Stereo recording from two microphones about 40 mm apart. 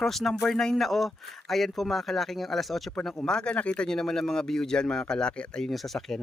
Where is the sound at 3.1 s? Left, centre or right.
Left.